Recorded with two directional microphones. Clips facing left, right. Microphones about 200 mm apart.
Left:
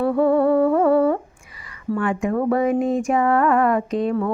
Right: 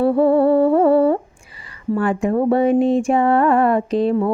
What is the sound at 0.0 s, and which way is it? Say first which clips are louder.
Humming: right 3 dB; 30° right (ahead or behind).